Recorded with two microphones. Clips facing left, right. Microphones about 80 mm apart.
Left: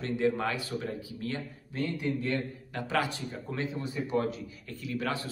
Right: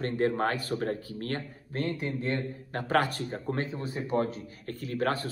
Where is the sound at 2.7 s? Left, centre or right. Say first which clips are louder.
Right 4 dB; right.